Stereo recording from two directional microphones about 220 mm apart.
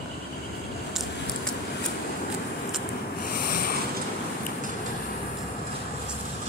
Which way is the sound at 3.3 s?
40° left (ahead or behind).